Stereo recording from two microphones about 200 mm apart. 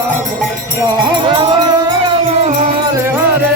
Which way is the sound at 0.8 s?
20° right (ahead or behind).